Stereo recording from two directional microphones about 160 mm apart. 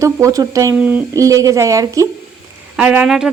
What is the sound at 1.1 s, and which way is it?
Speech, 20° right (ahead or behind).